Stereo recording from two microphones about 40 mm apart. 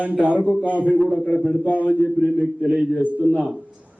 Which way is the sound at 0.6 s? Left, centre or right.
Left.